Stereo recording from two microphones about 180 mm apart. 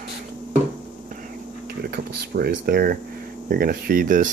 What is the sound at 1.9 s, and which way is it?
Speech, 60° right (ahead or behind).